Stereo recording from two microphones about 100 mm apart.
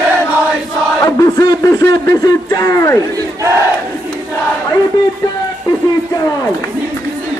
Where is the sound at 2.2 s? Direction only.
40° left (ahead or behind).